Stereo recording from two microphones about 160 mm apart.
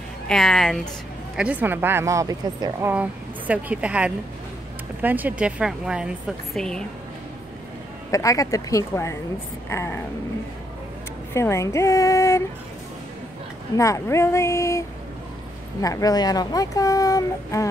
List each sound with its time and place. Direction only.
0.3 s a woman's voice: 5° left (ahead or behind)
1.3 s speech: 10° right (ahead or behind)
2.9 s a woman's voice: 10° right (ahead or behind)
8.1 s speech: 20° left (ahead or behind)
11.3 s speech: 15° left (ahead or behind)
13.7 s speech: 20° left (ahead or behind)